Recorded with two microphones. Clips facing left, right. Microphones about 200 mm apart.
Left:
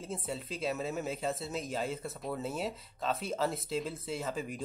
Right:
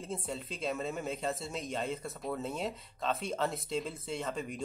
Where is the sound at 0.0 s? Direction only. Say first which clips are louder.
Even; centre (ahead or behind).